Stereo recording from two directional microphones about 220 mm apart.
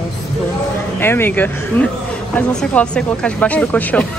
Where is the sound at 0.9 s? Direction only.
10° left (ahead or behind).